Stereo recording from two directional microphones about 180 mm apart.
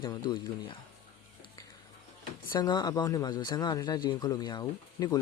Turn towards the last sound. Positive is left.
turn(degrees=20)  # may be behind; listen again after turning